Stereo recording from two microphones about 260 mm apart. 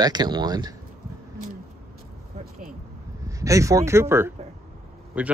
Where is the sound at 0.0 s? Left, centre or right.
Centre.